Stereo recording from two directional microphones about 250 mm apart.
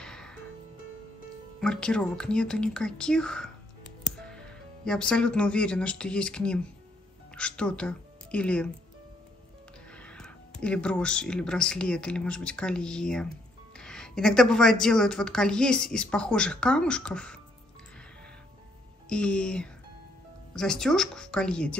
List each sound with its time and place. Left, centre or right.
0.0 s music: centre
1.6 s a woman's voice: centre
9.9 s speech: centre
19.0 s speech: centre